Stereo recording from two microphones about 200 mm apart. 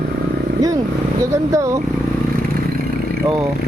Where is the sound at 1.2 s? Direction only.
15° right (ahead or behind).